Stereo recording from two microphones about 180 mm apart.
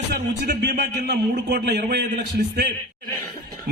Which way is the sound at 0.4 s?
60° right (ahead or behind).